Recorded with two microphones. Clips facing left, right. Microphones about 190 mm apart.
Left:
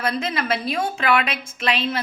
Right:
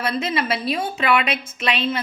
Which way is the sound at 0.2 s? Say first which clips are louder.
Right 1 dB; 5° right (ahead or behind).